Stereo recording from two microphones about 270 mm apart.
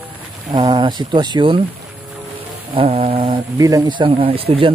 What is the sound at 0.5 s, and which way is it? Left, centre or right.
Speech, centre.